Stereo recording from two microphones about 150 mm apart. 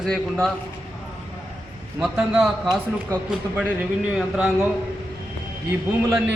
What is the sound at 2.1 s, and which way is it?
Speech, 5° right (ahead or behind).